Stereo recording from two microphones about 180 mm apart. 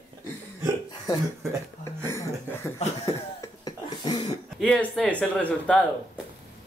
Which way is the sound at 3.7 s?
25° left (ahead or behind).